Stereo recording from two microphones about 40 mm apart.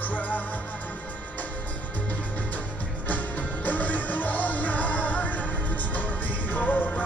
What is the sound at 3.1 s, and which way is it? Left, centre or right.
Music, left.